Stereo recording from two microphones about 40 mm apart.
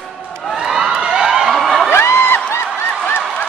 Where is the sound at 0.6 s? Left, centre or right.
Centre.